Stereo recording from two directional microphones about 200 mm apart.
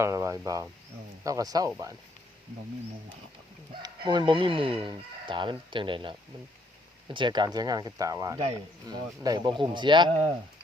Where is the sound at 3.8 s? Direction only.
20° right (ahead or behind).